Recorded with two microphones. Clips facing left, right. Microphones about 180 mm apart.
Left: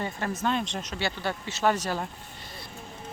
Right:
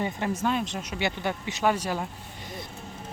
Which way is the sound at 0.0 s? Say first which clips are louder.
Right 2 dB; 15° right (ahead or behind).